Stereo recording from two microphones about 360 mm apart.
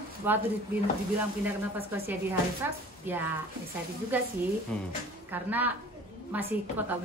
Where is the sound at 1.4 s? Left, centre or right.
Centre.